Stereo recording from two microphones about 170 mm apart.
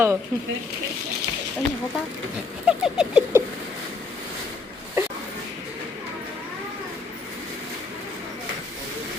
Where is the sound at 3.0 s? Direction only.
5° right (ahead or behind).